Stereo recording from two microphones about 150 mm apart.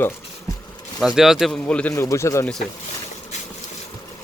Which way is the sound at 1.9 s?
20° left (ahead or behind).